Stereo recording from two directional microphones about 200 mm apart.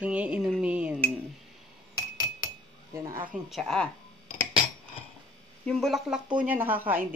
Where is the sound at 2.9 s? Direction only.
15° right (ahead or behind).